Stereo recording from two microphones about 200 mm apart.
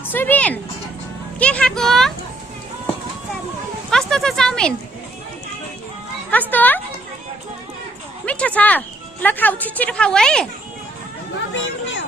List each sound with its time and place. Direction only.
0.1 s a woman's voice: 10° left (ahead or behind)
3.9 s a sound: centre (ahead or behind)
6.5 s a woman's voice: 10° left (ahead or behind)
8.2 s a woman's voice: 5° left (ahead or behind)
11.5 s speech: 70° left (ahead or behind)